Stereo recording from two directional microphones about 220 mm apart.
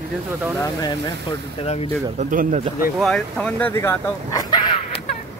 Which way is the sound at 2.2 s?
35° right (ahead or behind).